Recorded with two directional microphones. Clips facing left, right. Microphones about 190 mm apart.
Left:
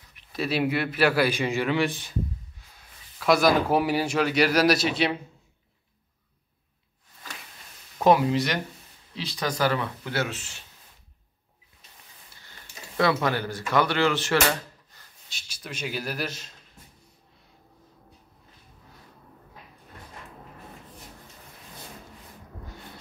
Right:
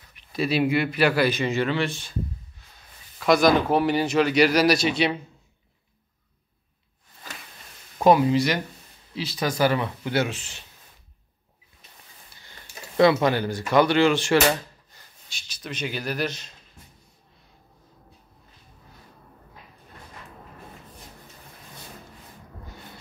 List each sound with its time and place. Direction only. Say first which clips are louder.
0.1 s a man's voice: right 3 dB; centre (ahead or behind); by 2.1 s 15° left (ahead or behind)
3.2 s a man's voice: right 2 dB; 5° left (ahead or behind)
8.0 s a man's voice: right 2 dB; centre (ahead or behind)
12.9 s speech: right 5 dB; 20° right (ahead or behind)
15.6 s a man's voice: right 2 dB; 5° left (ahead or behind)